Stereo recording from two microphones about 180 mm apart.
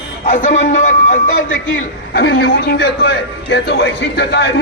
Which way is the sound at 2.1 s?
65° left (ahead or behind).